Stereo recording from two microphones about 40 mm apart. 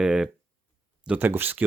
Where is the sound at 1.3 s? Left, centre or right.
Right.